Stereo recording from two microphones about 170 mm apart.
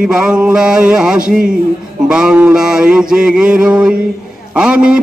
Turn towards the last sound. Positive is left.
turn(degrees=-5)  # may be behind; listen again after turning